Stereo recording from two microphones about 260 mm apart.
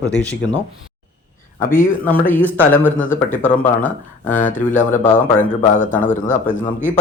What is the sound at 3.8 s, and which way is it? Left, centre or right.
Speech, left.